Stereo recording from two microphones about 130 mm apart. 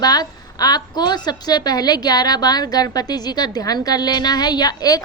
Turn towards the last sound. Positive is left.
turn(degrees=30)  # may be behind; listen again after turning